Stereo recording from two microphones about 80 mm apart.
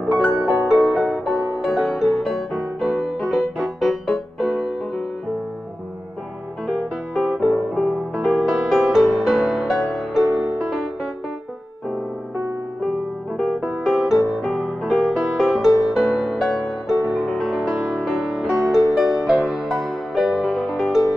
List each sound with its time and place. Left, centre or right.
0.0 s music: centre
6.7 s music: centre
13.4 s music: centre